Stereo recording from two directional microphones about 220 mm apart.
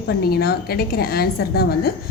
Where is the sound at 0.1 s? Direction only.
45° left (ahead or behind).